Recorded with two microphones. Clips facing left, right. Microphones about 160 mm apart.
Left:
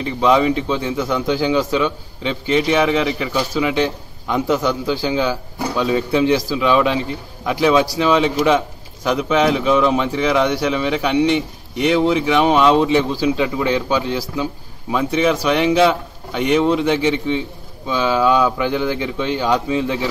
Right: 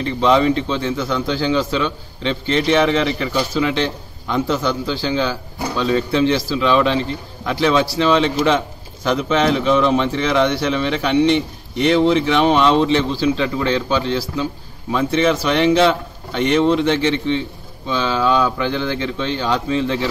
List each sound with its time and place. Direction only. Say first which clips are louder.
0.0 s speech: even; 10° left (ahead or behind)